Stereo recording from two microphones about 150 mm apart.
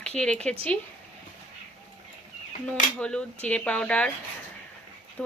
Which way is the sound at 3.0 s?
5° left (ahead or behind).